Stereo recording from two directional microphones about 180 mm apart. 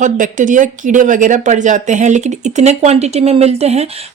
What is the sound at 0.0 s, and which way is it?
Speech, 45° right (ahead or behind).